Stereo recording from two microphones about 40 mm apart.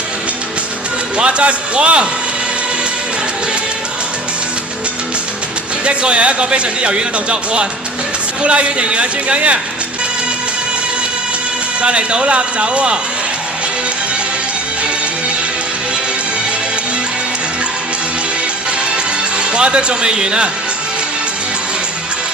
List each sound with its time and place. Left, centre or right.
1.1 s a man's voice: right
5.8 s a man's voice: right
11.8 s a man's voice: right
19.4 s a man's voice: right